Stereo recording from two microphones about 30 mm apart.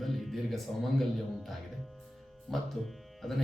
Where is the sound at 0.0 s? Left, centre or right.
Centre.